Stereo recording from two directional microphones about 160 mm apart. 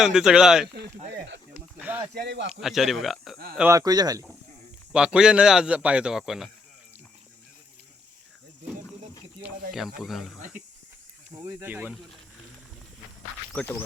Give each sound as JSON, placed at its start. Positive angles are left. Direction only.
{"t": 0.0, "sound": "a man's voice", "side_deg": -5}
{"t": 1.8, "sound": "speech", "side_deg": -10}
{"t": 2.1, "sound": "a man's voice", "side_deg": -90}
{"t": 2.6, "sound": "a man's voice", "side_deg": 0}
{"t": 3.6, "sound": "speech", "side_deg": -20}
{"t": 4.9, "sound": "a man's voice", "side_deg": -5}
{"t": 10.0, "sound": "a man's voice", "side_deg": 0}
{"t": 11.4, "sound": "speech", "side_deg": -10}
{"t": 13.5, "sound": "speech", "side_deg": 10}